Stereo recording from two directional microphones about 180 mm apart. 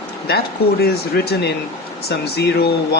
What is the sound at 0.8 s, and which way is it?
Speech, 65° left (ahead or behind).